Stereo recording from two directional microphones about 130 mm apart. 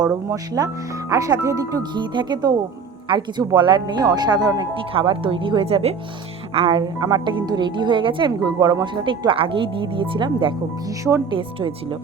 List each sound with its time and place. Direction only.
0.3 s speech: 30° right (ahead or behind)
11.3 s speech: 40° right (ahead or behind)